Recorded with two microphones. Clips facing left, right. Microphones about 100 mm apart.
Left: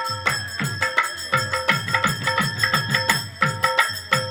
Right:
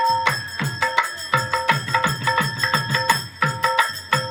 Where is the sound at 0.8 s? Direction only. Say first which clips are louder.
Right 4 dB; 20° right (ahead or behind).